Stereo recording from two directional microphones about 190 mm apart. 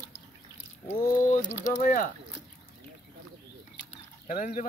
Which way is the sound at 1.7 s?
45° left (ahead or behind).